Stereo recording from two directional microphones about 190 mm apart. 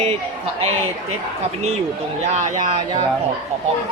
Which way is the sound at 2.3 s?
40° right (ahead or behind).